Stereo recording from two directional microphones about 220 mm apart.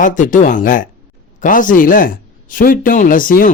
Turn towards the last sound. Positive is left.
turn(degrees=40)  # may be behind; listen again after turning